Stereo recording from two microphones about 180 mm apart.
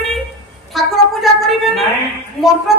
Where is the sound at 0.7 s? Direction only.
Centre (ahead or behind).